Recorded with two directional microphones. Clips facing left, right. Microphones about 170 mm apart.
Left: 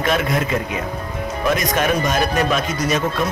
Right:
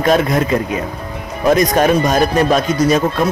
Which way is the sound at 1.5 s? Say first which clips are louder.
Right 8 dB; 35° right (ahead or behind).